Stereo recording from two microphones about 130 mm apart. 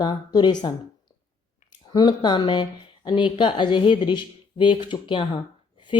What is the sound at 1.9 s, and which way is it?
Speech, 35° left (ahead or behind).